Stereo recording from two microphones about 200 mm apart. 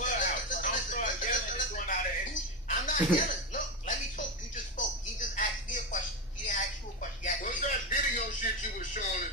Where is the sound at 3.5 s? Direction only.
40° left (ahead or behind).